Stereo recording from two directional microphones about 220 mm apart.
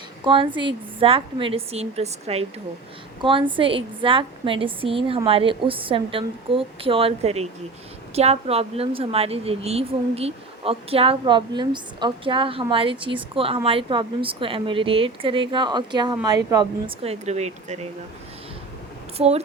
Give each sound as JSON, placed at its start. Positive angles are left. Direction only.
{"t": 0.3, "sound": "a woman's voice", "side_deg": -20}
{"t": 19.1, "sound": "a woman's voice", "side_deg": -30}